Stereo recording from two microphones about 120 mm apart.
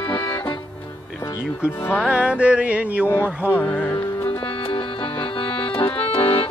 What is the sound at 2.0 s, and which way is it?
Music, 10° right (ahead or behind).